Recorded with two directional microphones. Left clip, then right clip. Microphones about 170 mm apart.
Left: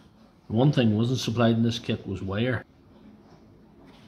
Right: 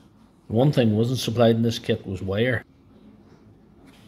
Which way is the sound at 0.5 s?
20° right (ahead or behind).